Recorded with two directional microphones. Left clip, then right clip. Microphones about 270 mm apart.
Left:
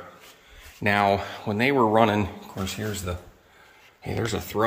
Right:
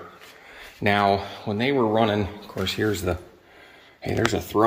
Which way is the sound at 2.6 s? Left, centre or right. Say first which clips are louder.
Right 7 dB; centre.